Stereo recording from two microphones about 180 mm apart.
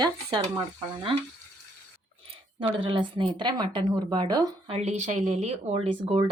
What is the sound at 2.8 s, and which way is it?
Speech, 30° right (ahead or behind).